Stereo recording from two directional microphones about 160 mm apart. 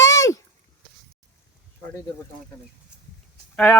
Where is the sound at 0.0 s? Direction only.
20° left (ahead or behind).